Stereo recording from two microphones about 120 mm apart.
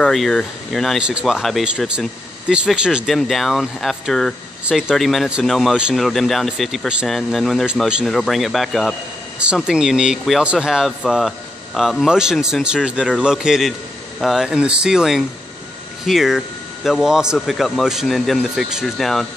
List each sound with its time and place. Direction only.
0.0 s speech: 5° left (ahead or behind)